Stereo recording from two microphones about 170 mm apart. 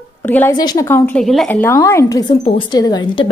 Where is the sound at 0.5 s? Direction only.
25° left (ahead or behind).